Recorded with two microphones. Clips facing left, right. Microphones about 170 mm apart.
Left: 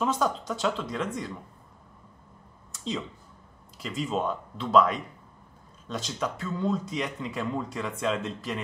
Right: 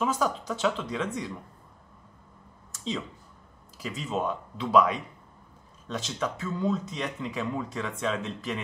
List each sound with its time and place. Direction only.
0.0 s speech: 5° right (ahead or behind)
2.7 s a sound: centre (ahead or behind)
3.8 s speech: centre (ahead or behind)
5.9 s speech: 5° left (ahead or behind)
6.4 s speech: 5° right (ahead or behind)
6.7 s speech: 10° left (ahead or behind)